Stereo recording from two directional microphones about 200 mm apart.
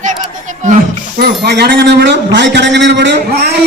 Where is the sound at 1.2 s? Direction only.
55° right (ahead or behind).